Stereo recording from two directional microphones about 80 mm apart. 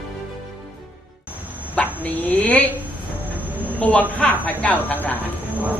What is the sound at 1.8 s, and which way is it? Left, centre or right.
Dog, centre.